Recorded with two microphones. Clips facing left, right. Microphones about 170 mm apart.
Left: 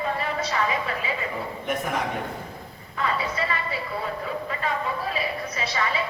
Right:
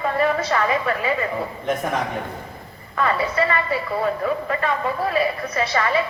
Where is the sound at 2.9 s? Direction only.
65° right (ahead or behind).